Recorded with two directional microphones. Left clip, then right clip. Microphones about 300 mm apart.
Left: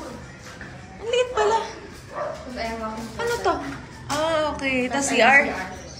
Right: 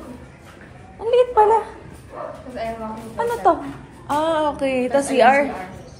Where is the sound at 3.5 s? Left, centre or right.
Centre.